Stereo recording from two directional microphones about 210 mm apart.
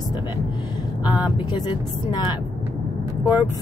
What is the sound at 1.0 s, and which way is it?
A woman's voice, 20° left (ahead or behind).